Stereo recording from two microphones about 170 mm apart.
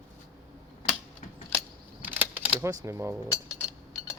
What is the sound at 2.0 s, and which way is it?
Camera, 10° right (ahead or behind).